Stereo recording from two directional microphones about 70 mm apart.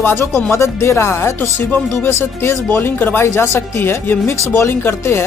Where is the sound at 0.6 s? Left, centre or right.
Left.